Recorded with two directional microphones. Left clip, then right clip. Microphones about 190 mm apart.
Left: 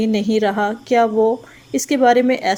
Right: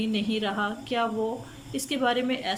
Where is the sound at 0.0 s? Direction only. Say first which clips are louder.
Left 11 dB; 35° left (ahead or behind).